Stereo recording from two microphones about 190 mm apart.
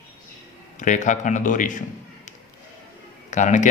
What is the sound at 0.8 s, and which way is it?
Speech, 40° left (ahead or behind).